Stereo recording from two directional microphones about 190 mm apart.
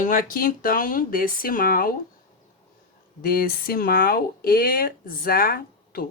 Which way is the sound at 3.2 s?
50° left (ahead or behind).